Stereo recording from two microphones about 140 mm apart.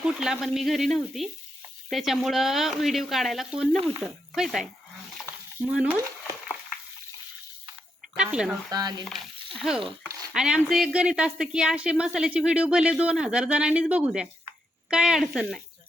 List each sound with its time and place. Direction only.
0.0 s a woman's voice: 5° right (ahead or behind)
8.1 s a woman's voice: 5° right (ahead or behind)
8.7 s stir: 30° right (ahead or behind)
9.6 s a woman's voice: 5° right (ahead or behind)